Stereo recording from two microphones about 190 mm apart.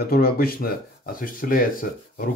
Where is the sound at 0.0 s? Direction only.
55° left (ahead or behind).